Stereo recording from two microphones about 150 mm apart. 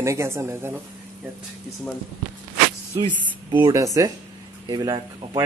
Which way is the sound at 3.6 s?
20° right (ahead or behind).